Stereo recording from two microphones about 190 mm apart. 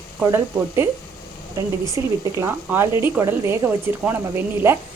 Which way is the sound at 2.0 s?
15° right (ahead or behind).